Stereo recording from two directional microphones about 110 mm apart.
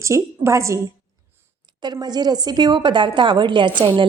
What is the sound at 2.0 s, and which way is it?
A woman's voice, 40° right (ahead or behind).